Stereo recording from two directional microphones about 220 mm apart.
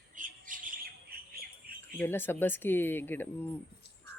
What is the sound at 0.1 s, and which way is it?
Bird, 35° right (ahead or behind).